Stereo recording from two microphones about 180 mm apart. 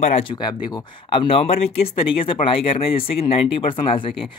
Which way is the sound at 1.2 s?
30° left (ahead or behind).